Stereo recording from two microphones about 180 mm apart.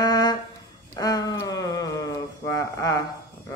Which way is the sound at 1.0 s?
20° left (ahead or behind).